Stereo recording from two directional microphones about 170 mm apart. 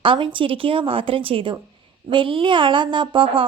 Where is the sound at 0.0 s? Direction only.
30° right (ahead or behind).